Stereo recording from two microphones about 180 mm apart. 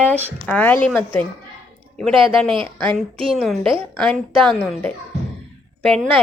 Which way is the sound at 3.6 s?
30° right (ahead or behind).